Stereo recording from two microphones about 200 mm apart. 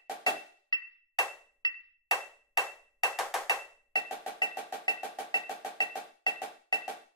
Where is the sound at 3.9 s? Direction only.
20° left (ahead or behind).